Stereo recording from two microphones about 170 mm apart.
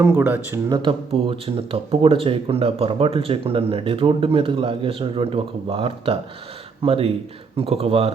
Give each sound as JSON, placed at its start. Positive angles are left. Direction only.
{"t": 0.0, "sound": "speech", "side_deg": -15}
{"t": 0.7, "sound": "speech", "side_deg": -30}